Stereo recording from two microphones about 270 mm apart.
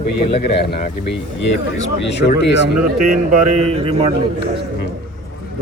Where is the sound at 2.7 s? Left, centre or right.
Centre.